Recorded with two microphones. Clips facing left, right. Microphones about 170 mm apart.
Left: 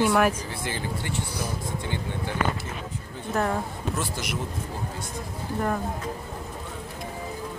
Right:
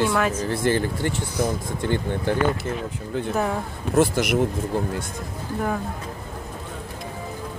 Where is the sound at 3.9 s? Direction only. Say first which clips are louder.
Right 14 dB; 60° right (ahead or behind).